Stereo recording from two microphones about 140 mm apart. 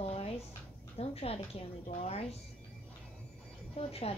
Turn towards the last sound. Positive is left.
turn(degrees=45)  # may be behind; listen again after turning